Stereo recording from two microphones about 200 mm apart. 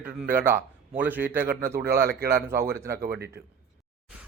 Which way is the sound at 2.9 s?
55° right (ahead or behind).